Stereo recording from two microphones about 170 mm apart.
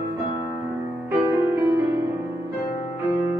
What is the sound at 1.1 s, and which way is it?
Music, 15° right (ahead or behind).